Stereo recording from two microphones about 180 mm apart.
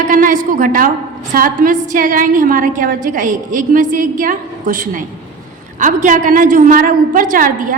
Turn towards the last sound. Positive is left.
turn(degrees=-50)  # may be behind; listen again after turning